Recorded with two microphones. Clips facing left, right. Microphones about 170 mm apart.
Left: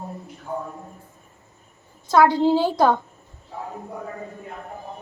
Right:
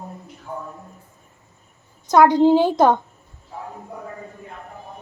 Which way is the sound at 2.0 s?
20° right (ahead or behind).